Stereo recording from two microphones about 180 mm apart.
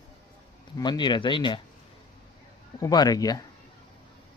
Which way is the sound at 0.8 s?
25° left (ahead or behind).